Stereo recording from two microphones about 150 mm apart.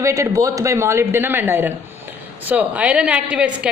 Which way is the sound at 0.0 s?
20° right (ahead or behind).